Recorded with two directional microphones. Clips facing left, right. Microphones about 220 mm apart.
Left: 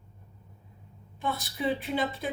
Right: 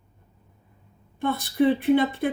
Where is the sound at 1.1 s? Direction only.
55° right (ahead or behind).